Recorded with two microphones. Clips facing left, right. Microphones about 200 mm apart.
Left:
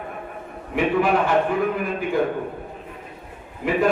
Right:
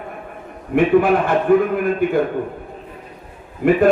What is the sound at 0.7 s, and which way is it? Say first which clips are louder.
A man's voice: right 6 dB; 55° right (ahead or behind).